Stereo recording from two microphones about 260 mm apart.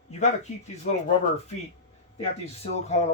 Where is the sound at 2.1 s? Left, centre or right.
Left.